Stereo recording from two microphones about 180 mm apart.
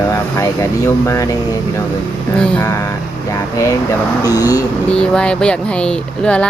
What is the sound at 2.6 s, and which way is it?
Speech, 15° left (ahead or behind).